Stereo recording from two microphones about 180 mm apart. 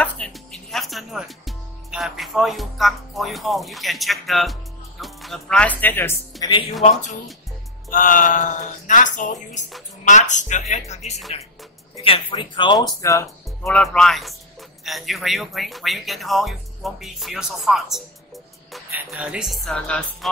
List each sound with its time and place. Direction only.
0.0 s speech: 5° left (ahead or behind)
6.4 s speech: 20° left (ahead or behind)
6.8 s speech: 40° left (ahead or behind); by 13.3 s 20° left (ahead or behind)
13.7 s speech: 5° left (ahead or behind)
19.0 s speech: 5° right (ahead or behind)